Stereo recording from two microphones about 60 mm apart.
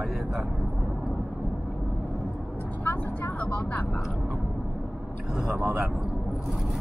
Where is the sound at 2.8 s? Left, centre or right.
Left.